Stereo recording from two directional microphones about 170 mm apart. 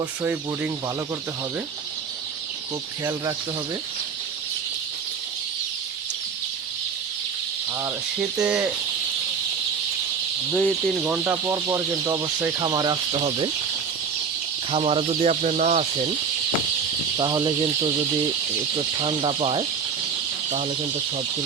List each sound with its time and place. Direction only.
0.2 s speech: 10° right (ahead or behind)
8.2 s speech: 5° right (ahead or behind)
10.5 s speech: 10° left (ahead or behind)
10.9 s speech: 5° right (ahead or behind); by 13.5 s 30° right (ahead or behind)
14.7 s speech: 35° right (ahead or behind)
17.2 s speech: 25° right (ahead or behind)
18.9 s speech: 30° right (ahead or behind)